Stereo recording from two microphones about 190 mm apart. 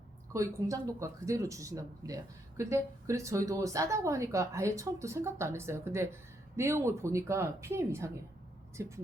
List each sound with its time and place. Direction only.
0.3 s speech: 15° right (ahead or behind)